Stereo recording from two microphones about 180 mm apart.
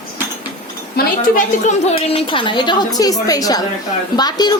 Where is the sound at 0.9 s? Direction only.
45° left (ahead or behind).